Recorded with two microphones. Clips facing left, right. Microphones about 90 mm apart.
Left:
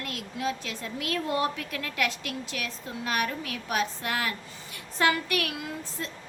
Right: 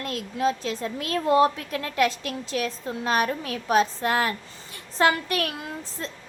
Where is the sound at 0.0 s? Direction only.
35° right (ahead or behind).